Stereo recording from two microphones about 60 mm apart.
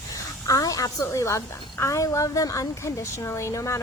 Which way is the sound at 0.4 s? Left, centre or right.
Left.